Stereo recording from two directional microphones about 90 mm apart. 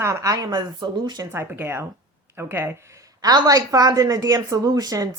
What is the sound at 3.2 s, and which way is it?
A woman's voice, 45° right (ahead or behind).